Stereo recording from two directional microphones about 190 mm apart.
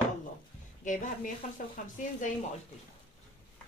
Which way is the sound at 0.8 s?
40° left (ahead or behind).